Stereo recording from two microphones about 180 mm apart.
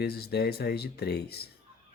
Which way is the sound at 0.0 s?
60° left (ahead or behind).